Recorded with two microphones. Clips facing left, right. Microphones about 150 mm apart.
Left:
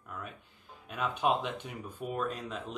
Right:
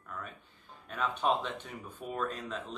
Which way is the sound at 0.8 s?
10° left (ahead or behind).